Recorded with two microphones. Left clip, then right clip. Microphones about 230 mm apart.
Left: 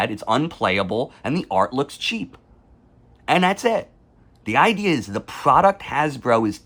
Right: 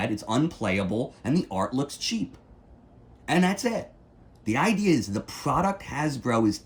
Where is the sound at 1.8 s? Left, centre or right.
Centre.